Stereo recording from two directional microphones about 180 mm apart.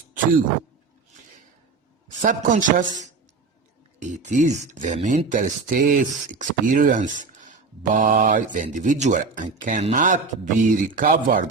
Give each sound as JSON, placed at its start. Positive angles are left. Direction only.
{"t": 2.2, "sound": "speech", "side_deg": -45}